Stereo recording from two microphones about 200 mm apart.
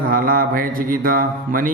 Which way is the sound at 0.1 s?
45° right (ahead or behind).